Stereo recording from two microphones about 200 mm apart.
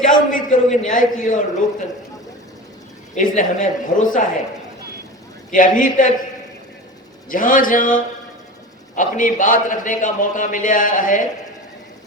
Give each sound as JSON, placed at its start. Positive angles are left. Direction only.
{"t": 0.0, "sound": "a man's voice", "side_deg": 40}
{"t": 3.2, "sound": "a man's voice", "side_deg": 40}
{"t": 5.5, "sound": "a man's voice", "side_deg": 40}
{"t": 7.3, "sound": "a man's voice", "side_deg": 45}